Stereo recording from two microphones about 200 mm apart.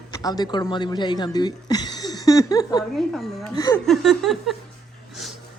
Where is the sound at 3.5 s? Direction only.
20° left (ahead or behind).